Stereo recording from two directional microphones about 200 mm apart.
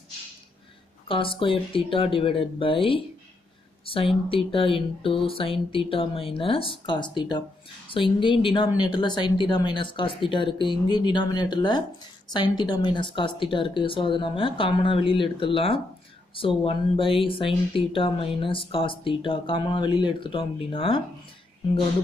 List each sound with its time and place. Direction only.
1.0 s speech: 25° left (ahead or behind)
3.8 s a sound: 25° left (ahead or behind)
4.3 s speech: 25° left (ahead or behind)